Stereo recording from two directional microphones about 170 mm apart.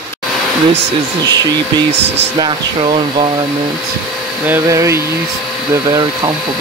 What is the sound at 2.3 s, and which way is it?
Speech, 30° right (ahead or behind).